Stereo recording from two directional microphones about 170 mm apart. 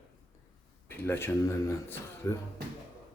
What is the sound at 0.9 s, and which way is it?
Speech, 15° left (ahead or behind).